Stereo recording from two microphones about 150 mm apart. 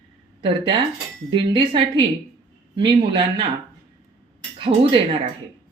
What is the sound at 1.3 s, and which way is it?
A man's voice, 35° right (ahead or behind).